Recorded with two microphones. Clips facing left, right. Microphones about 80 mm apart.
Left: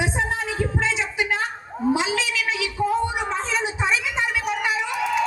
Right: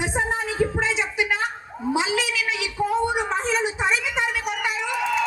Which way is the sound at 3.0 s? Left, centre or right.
Right.